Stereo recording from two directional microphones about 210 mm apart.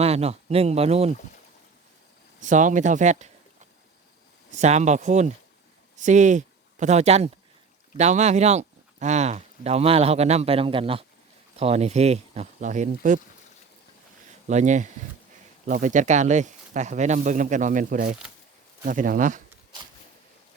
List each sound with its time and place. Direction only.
0.0 s speech: 30° right (ahead or behind)
2.4 s speech: 35° right (ahead or behind)
14.4 s speech: 35° right (ahead or behind)